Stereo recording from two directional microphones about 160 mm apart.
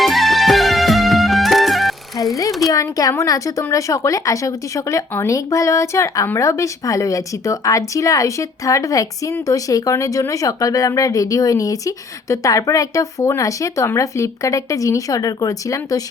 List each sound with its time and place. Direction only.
0.0 s music: centre (ahead or behind)
2.6 s speech: 20° left (ahead or behind)